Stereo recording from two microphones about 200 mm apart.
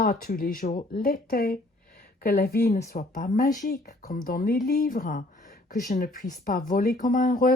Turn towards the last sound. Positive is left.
turn(degrees=40)  # may be behind; listen again after turning